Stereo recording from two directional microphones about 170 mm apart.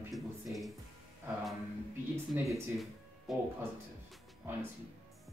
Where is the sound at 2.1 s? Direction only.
20° right (ahead or behind).